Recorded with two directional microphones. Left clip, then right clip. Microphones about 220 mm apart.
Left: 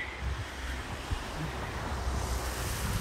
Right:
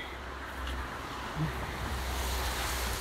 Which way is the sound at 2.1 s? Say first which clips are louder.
Right 2 dB; 40° right (ahead or behind).